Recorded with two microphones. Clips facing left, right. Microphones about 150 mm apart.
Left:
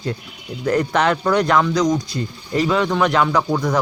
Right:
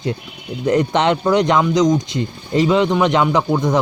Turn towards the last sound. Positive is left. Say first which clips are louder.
# right 2 dB
turn(degrees=-20)  # may be behind; listen again after turning